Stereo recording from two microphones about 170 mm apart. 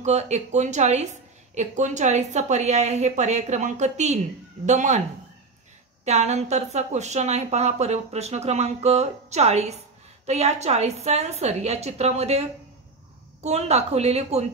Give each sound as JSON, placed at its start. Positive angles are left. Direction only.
{"t": 0.0, "sound": "a woman's voice", "side_deg": -40}
{"t": 6.0, "sound": "a woman's voice", "side_deg": -40}